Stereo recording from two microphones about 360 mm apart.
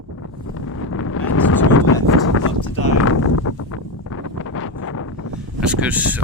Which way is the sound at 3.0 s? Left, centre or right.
Left.